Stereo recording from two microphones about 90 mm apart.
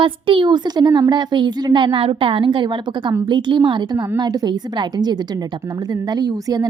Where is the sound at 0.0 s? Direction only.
70° right (ahead or behind).